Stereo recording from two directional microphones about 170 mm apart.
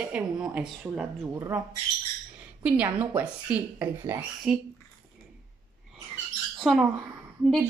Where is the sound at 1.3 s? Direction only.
15° right (ahead or behind).